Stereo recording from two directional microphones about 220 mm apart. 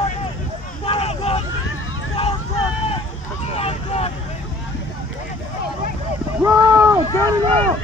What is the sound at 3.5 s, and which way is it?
Vehicle, 25° left (ahead or behind).